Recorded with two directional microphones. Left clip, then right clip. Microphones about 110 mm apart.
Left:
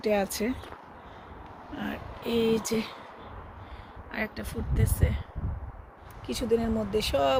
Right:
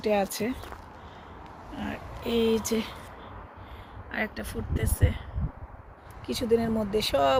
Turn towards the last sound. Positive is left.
turn(degrees=-25)  # may be behind; listen again after turning